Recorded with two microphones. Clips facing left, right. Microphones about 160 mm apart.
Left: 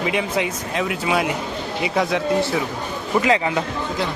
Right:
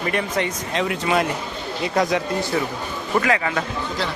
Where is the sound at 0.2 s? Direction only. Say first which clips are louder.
Left 1 dB; 5° left (ahead or behind).